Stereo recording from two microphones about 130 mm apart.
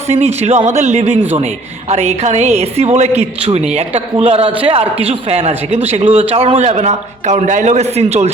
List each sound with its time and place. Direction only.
0.1 s a man's voice: 55° right (ahead or behind)